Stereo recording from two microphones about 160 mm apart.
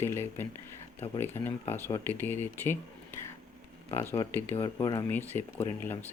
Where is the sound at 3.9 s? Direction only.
15° left (ahead or behind).